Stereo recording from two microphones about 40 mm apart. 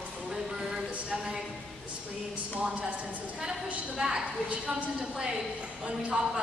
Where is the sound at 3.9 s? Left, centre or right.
Centre.